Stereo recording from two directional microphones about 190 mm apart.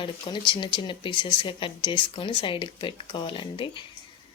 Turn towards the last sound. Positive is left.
turn(degrees=25)  # may be behind; listen again after turning